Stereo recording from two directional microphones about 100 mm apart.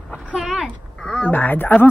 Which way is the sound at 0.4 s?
Centre (ahead or behind).